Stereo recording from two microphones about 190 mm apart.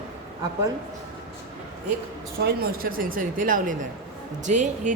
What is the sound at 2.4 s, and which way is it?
Speech, 50° right (ahead or behind).